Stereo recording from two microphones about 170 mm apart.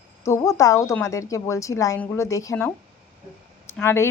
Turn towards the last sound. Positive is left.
turn(degrees=15)  # may be behind; listen again after turning